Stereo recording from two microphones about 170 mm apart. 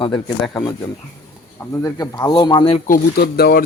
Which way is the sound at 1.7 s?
20° left (ahead or behind).